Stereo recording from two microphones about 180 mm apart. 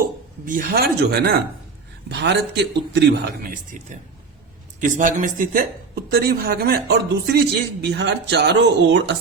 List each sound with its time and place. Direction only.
0.4 s a man's voice: 55° right (ahead or behind); by 3.2 s 70° right (ahead or behind)
3.5 s speech: 45° right (ahead or behind); by 9.1 s 75° right (ahead or behind)